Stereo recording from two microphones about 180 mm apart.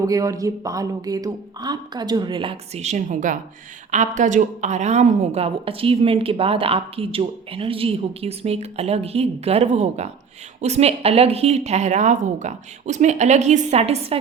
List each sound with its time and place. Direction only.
0.0 s a woman's voice: 20° right (ahead or behind); by 14.2 s 35° right (ahead or behind)